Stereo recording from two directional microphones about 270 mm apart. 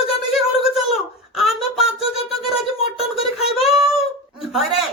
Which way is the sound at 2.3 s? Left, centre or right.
Left.